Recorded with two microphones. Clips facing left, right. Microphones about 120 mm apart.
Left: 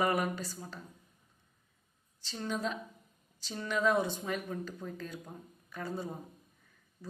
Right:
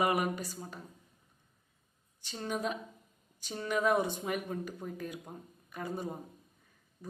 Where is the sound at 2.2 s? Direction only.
25° right (ahead or behind).